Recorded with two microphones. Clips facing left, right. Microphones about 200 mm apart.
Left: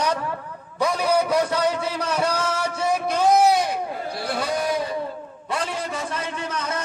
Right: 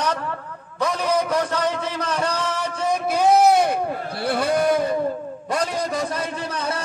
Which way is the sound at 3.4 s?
50° right (ahead or behind).